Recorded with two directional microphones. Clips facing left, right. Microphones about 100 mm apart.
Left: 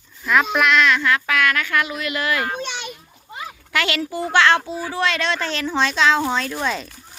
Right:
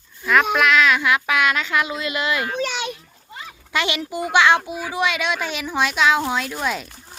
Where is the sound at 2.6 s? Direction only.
85° right.